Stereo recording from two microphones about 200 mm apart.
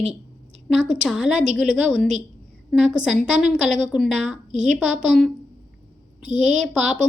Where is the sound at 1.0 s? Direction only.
Centre (ahead or behind).